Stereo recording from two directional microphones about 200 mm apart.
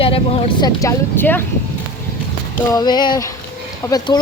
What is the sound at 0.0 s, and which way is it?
Vehicle, 25° left (ahead or behind).